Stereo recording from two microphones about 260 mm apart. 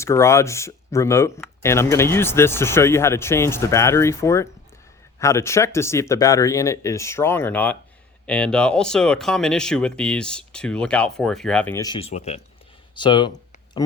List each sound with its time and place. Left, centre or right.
0.0 s speech: centre